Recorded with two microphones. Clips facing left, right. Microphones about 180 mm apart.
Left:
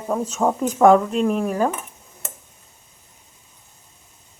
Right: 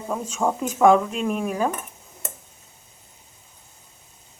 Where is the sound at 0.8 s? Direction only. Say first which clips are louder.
Left 2 dB; 25° left (ahead or behind).